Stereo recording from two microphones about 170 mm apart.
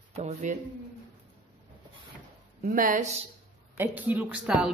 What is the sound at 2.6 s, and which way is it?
Speech, 50° right (ahead or behind).